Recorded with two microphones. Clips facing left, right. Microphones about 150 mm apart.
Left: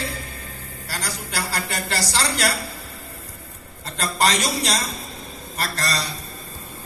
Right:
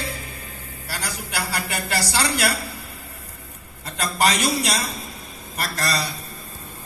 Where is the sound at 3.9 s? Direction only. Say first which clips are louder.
Even; 10° right (ahead or behind).